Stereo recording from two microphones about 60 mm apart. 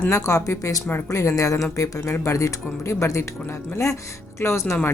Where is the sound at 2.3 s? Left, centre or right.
Left.